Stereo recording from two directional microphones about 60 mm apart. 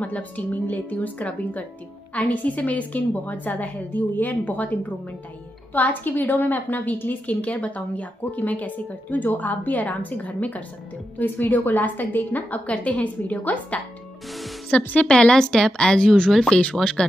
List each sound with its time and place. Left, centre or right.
0.0 s a woman's voice: left
15.0 s speech: centre